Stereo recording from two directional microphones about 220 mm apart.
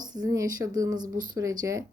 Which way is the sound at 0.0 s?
15° right (ahead or behind).